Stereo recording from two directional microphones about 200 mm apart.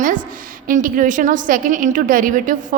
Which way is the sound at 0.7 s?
40° right (ahead or behind).